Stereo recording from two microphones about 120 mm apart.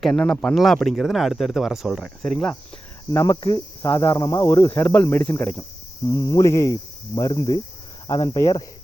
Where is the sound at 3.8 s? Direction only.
30° left (ahead or behind).